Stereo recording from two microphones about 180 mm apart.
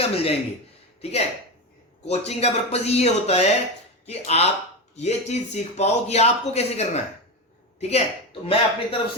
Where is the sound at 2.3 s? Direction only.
35° left (ahead or behind).